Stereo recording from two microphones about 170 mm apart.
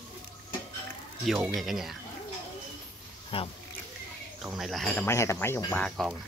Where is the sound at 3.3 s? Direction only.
30° left (ahead or behind).